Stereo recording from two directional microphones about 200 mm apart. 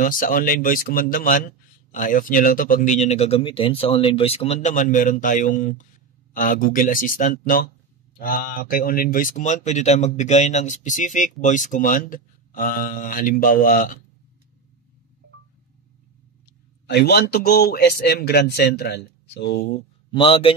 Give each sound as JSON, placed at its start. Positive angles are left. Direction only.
{"t": 0.0, "sound": "a man's voice", "side_deg": 45}
{"t": 16.8, "sound": "a man's voice", "side_deg": 55}
{"t": 20.1, "sound": "a man's voice", "side_deg": 25}